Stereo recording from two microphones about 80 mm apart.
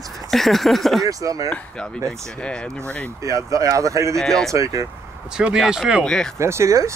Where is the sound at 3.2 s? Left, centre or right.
Right.